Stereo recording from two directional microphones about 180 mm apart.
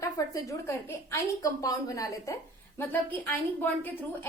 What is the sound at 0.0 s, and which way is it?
A woman's voice, 15° left (ahead or behind).